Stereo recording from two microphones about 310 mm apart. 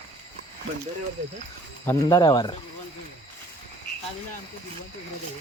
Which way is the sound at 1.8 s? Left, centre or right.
Centre.